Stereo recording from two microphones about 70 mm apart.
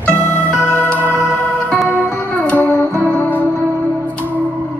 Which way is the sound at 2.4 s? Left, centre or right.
Left.